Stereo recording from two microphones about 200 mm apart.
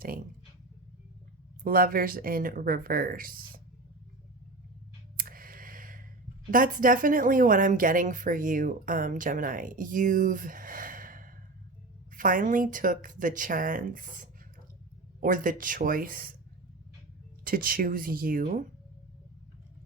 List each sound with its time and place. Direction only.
1.6 s speech: 45° right (ahead or behind)
5.1 s a sound: 45° right (ahead or behind)
6.5 s a woman's voice: 40° right (ahead or behind)
17.4 s speech: 45° right (ahead or behind)